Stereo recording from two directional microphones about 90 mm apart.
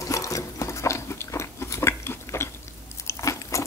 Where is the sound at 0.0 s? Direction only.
40° left (ahead or behind).